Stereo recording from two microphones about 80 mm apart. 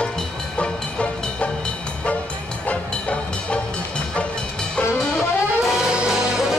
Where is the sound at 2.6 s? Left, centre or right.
Centre.